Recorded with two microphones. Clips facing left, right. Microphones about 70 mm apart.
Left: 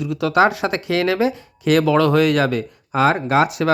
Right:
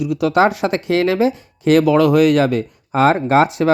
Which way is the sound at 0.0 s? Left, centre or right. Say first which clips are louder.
Right 2 dB; centre.